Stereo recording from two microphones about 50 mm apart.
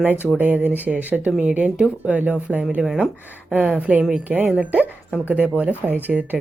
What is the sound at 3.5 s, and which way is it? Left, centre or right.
Speech, right.